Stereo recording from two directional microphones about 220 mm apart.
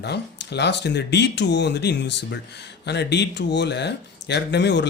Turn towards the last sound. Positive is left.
turn(degrees=50)  # may be behind; listen again after turning